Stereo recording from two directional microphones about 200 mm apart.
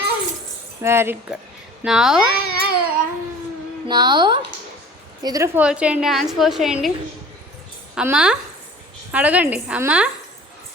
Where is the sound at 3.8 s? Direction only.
20° right (ahead or behind).